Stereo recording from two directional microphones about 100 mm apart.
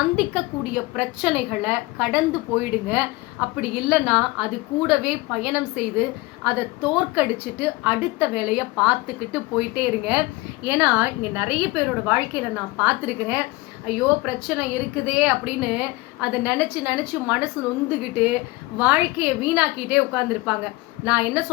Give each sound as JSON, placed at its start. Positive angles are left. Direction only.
{"t": 0.9, "sound": "a woman's voice", "side_deg": -5}